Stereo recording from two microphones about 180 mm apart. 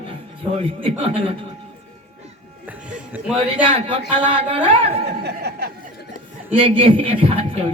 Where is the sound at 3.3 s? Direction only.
30° right (ahead or behind).